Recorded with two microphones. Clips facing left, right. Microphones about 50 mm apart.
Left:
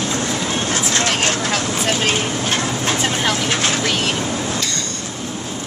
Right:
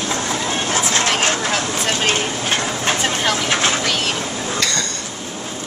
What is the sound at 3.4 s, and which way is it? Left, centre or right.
Vehicle, centre.